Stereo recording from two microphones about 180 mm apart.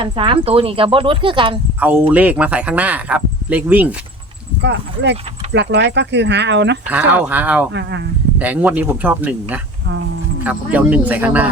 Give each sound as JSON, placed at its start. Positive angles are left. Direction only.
{"t": 0.0, "sound": "speech", "side_deg": -30}
{"t": 1.8, "sound": "speech", "side_deg": -10}
{"t": 4.6, "sound": "speech", "side_deg": -75}
{"t": 6.9, "sound": "speech", "side_deg": -10}
{"t": 7.7, "sound": "speech", "side_deg": -75}
{"t": 8.4, "sound": "speech", "side_deg": -10}